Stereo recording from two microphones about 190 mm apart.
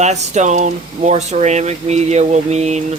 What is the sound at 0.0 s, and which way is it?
Speech, 35° right (ahead or behind).